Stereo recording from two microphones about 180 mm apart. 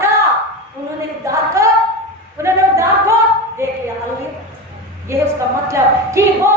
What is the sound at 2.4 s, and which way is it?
Singing, 15° right (ahead or behind).